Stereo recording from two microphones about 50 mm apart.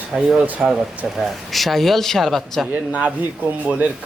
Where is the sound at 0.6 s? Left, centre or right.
Centre.